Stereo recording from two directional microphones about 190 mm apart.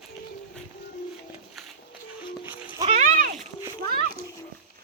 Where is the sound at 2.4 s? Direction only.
10° right (ahead or behind).